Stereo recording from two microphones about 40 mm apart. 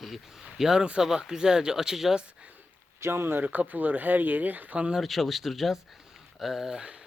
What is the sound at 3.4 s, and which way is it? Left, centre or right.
Speech, right.